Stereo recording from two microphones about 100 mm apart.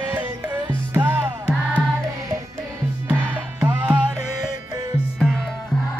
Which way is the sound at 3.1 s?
20° right (ahead or behind).